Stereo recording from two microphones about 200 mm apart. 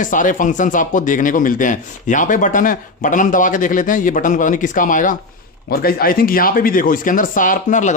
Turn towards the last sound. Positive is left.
turn(degrees=40)  # may be behind; listen again after turning